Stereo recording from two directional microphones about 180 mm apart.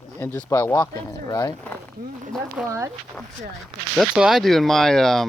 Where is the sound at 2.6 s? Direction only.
5° right (ahead or behind).